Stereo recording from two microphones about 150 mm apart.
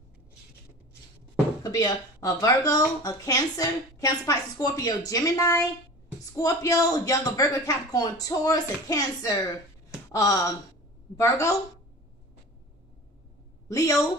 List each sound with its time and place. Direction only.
1.6 s speech: 25° left (ahead or behind)
13.7 s speech: 20° left (ahead or behind)